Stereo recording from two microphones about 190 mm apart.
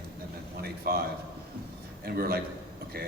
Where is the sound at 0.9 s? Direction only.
55° right (ahead or behind).